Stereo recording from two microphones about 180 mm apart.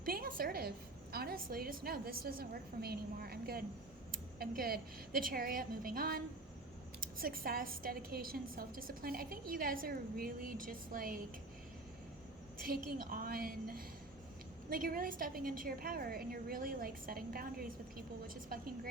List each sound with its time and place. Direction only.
0.0 s a sound: 55° right (ahead or behind)
1.1 s a woman's voice: 55° right (ahead or behind)
12.5 s a woman's voice: 55° right (ahead or behind)